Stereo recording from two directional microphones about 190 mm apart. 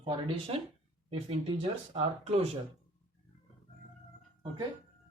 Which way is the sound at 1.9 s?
35° right (ahead or behind).